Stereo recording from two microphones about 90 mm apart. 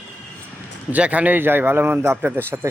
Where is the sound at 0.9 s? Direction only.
15° right (ahead or behind).